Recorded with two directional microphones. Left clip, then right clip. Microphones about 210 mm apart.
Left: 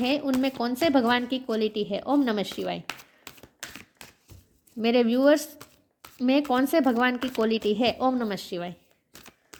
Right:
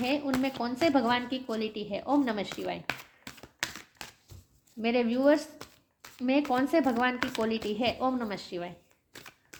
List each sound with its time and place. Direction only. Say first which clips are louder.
0.0 s a woman's voice: left 4 dB; 50° left (ahead or behind)
2.8 s typing: right 2 dB; 5° left (ahead or behind)
4.8 s a woman's voice: left 5 dB; 50° left (ahead or behind)